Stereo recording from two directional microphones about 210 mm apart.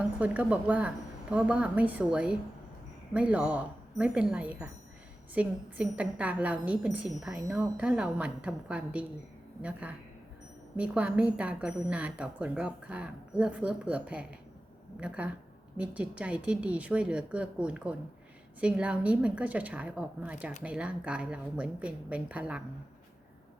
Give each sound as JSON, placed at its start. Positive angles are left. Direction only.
{"t": 0.2, "sound": "a woman's voice", "side_deg": -5}